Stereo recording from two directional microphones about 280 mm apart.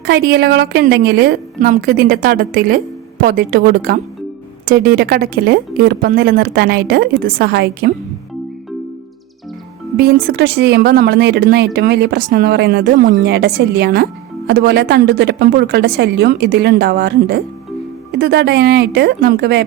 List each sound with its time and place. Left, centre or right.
0.0 s speech: right
10.0 s speech: right